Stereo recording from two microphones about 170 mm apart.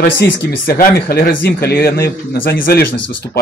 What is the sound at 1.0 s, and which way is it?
Speech, 65° left (ahead or behind).